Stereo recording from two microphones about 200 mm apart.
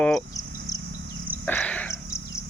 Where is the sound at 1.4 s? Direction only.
10° left (ahead or behind).